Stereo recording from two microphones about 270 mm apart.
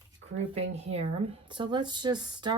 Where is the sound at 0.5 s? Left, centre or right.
Right.